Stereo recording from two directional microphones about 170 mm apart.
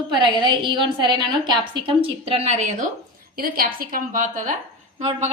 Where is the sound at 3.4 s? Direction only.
55° right (ahead or behind).